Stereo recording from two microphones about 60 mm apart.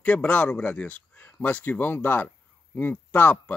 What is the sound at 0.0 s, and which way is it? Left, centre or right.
Speech, centre.